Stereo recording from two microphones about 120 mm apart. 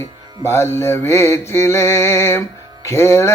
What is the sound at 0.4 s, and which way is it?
Mantra, 20° left (ahead or behind).